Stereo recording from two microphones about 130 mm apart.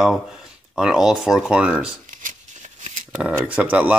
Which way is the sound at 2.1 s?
85° right.